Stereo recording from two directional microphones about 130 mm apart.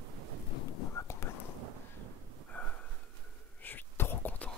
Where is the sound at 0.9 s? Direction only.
20° left (ahead or behind).